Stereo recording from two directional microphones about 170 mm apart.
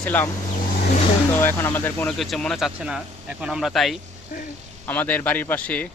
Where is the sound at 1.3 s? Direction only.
15° left (ahead or behind).